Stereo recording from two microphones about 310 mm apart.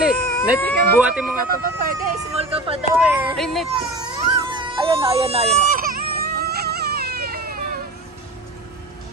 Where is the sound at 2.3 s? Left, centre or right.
Centre.